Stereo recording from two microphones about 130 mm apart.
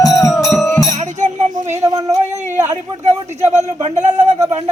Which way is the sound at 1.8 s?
25° right (ahead or behind).